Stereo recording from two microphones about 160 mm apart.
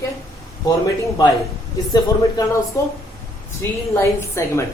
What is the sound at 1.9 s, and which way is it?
Speech, 25° left (ahead or behind).